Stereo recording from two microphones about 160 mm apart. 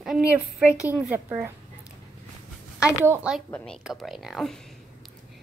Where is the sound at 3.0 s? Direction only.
5° right (ahead or behind).